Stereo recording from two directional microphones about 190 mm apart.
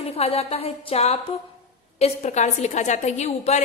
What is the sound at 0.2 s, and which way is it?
A woman's voice, 30° left (ahead or behind).